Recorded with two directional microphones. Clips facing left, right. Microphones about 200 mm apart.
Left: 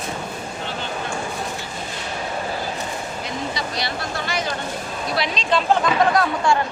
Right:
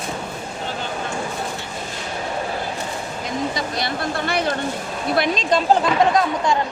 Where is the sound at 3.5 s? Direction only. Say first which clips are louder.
Right 2 dB; 50° right (ahead or behind).